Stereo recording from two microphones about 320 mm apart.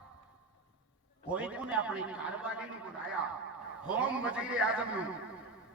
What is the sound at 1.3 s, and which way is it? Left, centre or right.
A man's voice, centre.